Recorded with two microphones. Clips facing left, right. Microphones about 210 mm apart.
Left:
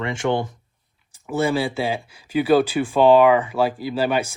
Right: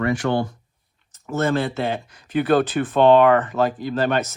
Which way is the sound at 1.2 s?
10° left (ahead or behind).